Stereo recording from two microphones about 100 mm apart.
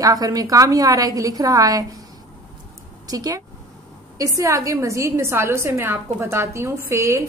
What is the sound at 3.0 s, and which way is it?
A woman's voice, 40° right (ahead or behind).